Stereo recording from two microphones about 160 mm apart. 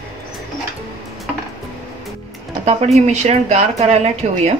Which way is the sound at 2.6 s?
40° right (ahead or behind).